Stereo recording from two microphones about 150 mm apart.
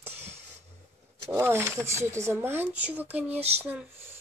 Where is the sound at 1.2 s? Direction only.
15° right (ahead or behind).